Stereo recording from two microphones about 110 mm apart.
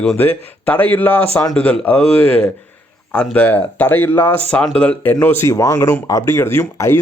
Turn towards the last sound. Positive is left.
turn(degrees=25)  # may be behind; listen again after turning